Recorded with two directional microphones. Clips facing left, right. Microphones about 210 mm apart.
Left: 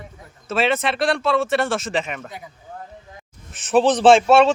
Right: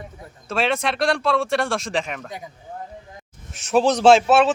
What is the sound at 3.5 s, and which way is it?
Speech, centre (ahead or behind).